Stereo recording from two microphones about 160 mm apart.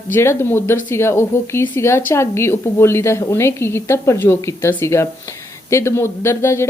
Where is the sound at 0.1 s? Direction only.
15° left (ahead or behind).